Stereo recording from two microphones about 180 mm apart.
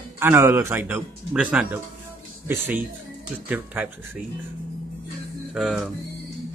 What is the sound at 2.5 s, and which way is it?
Speech, 10° right (ahead or behind).